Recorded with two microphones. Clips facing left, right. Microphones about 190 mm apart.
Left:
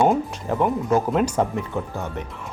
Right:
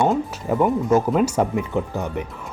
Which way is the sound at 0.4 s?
5° right (ahead or behind).